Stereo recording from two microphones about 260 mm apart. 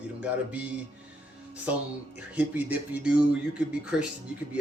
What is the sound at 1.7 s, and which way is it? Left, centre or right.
Speech, centre.